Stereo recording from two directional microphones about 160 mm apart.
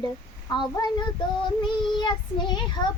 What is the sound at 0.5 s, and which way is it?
Child singing, 30° left (ahead or behind).